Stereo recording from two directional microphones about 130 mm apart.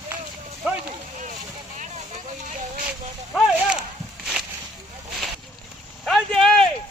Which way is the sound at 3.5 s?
5° right (ahead or behind).